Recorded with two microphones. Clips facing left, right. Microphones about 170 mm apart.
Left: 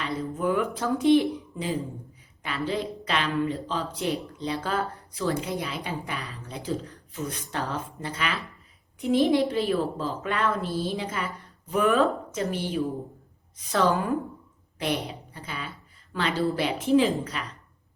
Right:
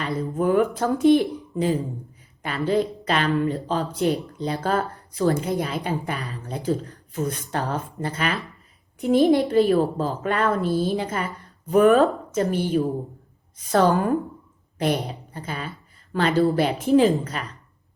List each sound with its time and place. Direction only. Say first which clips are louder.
0.0 s a woman's voice: right 4 dB; 45° right (ahead or behind)